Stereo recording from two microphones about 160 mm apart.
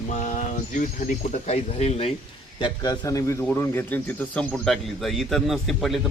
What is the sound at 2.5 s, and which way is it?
A man's voice, 25° left (ahead or behind).